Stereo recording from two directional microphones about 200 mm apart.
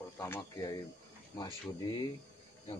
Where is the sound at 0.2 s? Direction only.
15° left (ahead or behind).